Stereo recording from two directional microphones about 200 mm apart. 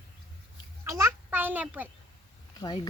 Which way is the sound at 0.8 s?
15° right (ahead or behind).